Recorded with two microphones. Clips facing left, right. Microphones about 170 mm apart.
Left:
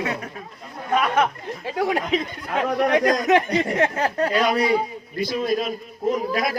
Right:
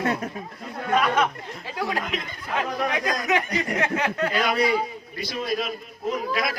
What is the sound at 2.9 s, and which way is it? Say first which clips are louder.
Speech: left 10 dB; 45° left (ahead or behind).